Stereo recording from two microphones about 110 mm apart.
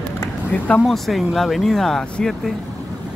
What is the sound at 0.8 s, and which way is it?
Speech, centre (ahead or behind).